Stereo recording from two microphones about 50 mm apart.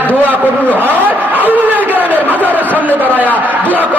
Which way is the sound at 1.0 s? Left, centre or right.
Right.